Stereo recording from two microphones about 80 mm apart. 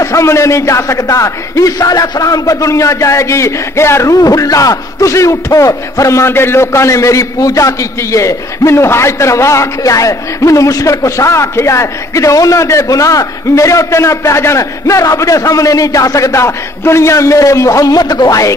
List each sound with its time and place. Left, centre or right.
0.0 s a man's voice: left